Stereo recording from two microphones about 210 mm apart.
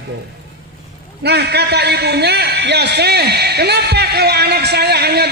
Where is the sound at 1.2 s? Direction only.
50° right (ahead or behind).